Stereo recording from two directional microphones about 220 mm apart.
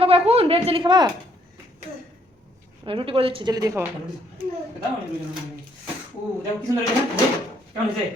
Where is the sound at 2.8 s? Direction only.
25° right (ahead or behind).